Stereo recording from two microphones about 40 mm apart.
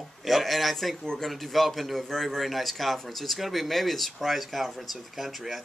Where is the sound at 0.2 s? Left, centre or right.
Centre.